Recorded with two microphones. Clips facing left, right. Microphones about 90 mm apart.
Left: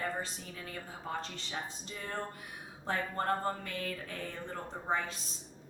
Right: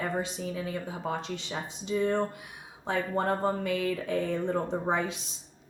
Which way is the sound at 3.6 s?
90° right.